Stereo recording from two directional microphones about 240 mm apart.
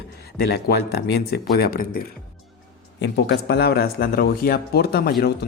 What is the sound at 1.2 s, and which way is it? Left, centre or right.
Speech, left.